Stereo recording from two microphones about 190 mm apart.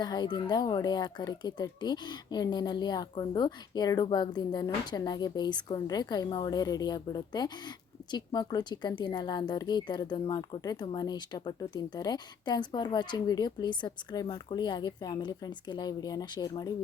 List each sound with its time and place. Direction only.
0.0 s speech: 20° left (ahead or behind)